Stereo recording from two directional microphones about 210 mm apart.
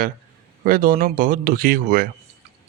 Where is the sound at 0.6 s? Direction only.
45° right (ahead or behind).